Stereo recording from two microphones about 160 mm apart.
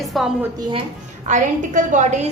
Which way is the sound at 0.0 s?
Centre (ahead or behind).